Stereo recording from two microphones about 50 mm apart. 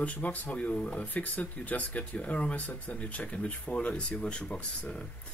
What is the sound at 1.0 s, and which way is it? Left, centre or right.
Speech, left.